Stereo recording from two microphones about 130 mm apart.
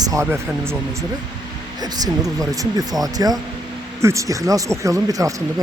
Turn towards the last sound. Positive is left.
turn(degrees=-25)  # may be behind; listen again after turning